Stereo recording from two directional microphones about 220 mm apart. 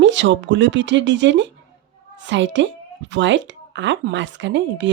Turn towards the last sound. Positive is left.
turn(degrees=-55)  # may be behind; listen again after turning